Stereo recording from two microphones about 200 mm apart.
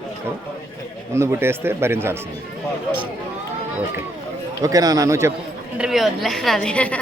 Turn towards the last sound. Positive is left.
turn(degrees=5)  # may be behind; listen again after turning